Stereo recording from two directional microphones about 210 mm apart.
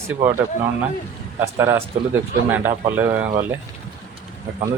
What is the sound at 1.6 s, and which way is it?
Speech, 10° right (ahead or behind).